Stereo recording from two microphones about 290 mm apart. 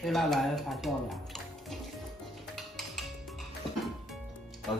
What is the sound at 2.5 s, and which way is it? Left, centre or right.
Music, centre.